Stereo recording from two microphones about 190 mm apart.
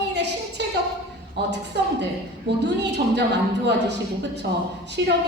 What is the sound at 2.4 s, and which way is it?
A woman's voice, 65° right (ahead or behind).